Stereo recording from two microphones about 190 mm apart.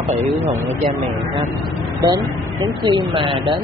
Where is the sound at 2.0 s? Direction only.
20° right (ahead or behind).